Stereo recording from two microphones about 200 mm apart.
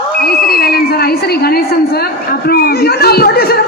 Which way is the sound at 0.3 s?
50° left (ahead or behind).